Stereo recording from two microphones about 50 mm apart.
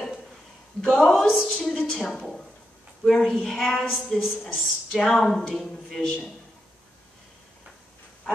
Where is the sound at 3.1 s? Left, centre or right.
Centre.